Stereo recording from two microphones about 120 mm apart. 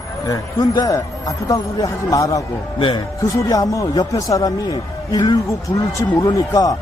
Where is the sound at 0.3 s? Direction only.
30° left (ahead or behind).